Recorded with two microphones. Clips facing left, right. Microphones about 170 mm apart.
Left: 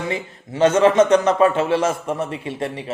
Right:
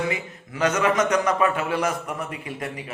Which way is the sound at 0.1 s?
30° left (ahead or behind).